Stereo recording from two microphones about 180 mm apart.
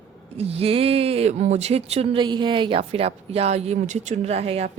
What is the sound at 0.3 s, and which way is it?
Speech, 35° right (ahead or behind).